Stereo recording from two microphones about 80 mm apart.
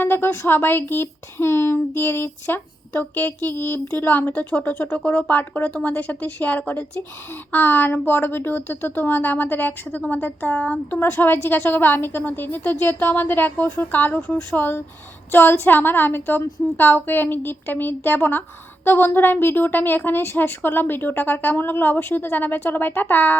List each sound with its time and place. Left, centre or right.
0.0 s speech: left